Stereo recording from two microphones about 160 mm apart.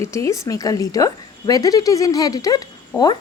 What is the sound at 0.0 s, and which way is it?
Speech, 20° left (ahead or behind).